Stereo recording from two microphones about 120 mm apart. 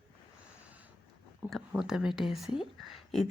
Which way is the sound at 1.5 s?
Centre (ahead or behind).